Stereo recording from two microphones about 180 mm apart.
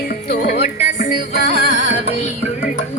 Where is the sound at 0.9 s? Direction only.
45° left (ahead or behind).